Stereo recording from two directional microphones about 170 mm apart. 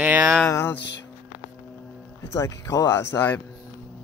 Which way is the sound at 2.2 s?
15° left (ahead or behind).